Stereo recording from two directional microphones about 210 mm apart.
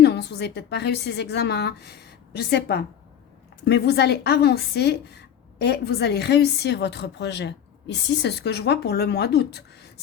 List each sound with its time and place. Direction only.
0.0 s a woman's voice: 55° left (ahead or behind)